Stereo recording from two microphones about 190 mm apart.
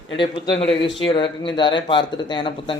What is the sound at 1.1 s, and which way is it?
Speech, 25° left (ahead or behind).